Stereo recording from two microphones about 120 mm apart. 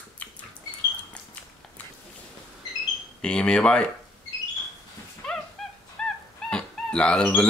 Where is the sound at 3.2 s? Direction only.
10° left (ahead or behind).